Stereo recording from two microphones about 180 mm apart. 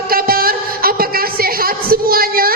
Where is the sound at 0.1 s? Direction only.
55° right (ahead or behind).